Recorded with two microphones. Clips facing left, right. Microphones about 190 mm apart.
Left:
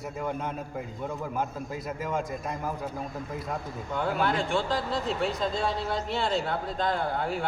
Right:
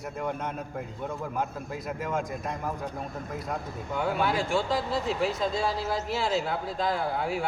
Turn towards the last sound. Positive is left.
turn(degrees=-5)  # may be behind; listen again after turning